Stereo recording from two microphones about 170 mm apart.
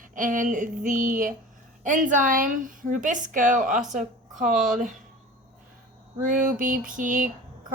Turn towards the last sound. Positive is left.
turn(degrees=-50)  # may be behind; listen again after turning